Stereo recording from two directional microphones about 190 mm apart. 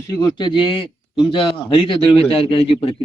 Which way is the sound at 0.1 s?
20° left (ahead or behind).